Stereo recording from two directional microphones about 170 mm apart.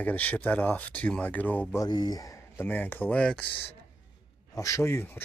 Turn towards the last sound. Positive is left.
turn(degrees=15)  # may be behind; listen again after turning